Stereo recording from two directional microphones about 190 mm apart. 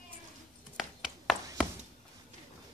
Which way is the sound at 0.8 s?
Centre (ahead or behind).